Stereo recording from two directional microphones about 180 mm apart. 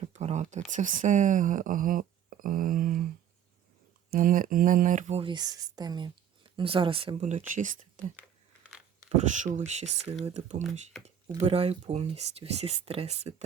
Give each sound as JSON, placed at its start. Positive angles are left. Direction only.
{"t": 0.1, "sound": "a sound", "side_deg": -40}
{"t": 0.7, "sound": "speech", "side_deg": -45}
{"t": 4.1, "sound": "speech", "side_deg": -50}
{"t": 10.9, "sound": "speech", "side_deg": 0}
{"t": 11.3, "sound": "speech", "side_deg": -35}